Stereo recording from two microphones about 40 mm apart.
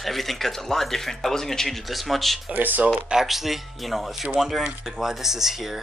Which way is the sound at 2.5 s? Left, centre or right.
Right.